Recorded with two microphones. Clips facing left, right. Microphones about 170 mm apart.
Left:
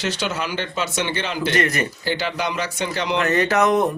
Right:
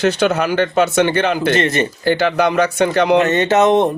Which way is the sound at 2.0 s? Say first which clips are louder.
Right 12 dB; 55° right (ahead or behind).